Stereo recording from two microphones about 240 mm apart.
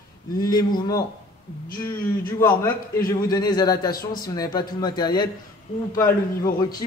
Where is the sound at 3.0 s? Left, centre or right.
Centre.